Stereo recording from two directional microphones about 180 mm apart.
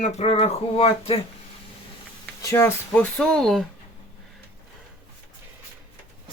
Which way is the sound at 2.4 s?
20° left (ahead or behind).